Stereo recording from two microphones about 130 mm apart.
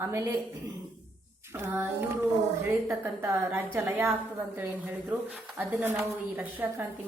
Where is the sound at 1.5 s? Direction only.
15° right (ahead or behind).